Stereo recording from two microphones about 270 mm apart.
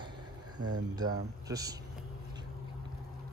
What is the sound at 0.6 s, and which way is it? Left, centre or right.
Speech, right.